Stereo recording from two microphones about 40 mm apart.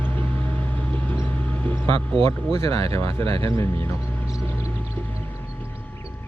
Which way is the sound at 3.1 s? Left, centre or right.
Left.